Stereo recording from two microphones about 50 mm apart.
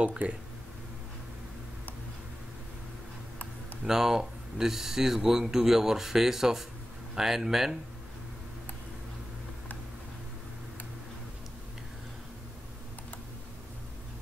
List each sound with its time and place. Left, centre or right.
0.0 s speech: right
3.8 s speech: centre